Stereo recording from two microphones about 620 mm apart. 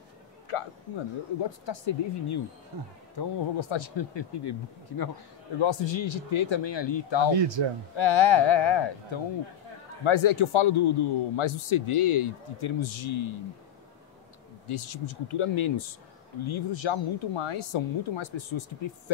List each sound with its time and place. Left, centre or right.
0.5 s a man's voice: left
2.7 s speech: right
3.2 s a man's voice: left
7.3 s speech: right
7.9 s a man's voice: left
14.7 s a man's voice: left